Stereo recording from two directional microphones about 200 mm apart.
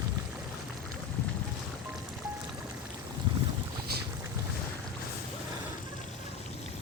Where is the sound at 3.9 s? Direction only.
50° right (ahead or behind).